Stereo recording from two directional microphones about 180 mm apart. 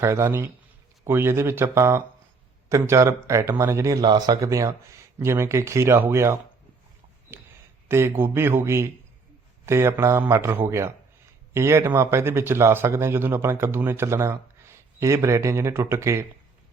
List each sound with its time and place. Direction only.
0.0 s speech: 15° right (ahead or behind)
7.3 s a sound: 15° right (ahead or behind)
7.9 s speech: 15° right (ahead or behind)